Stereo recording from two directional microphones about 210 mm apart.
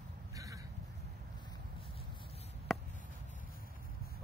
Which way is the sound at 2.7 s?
Centre (ahead or behind).